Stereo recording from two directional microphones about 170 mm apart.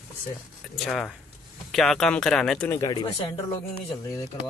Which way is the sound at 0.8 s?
Centre (ahead or behind).